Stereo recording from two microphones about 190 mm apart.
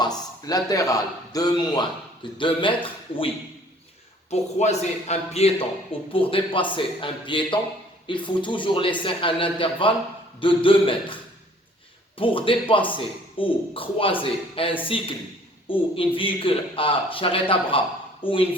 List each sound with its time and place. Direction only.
0.0 s speech: 20° left (ahead or behind)
4.3 s a man's voice: 35° left (ahead or behind)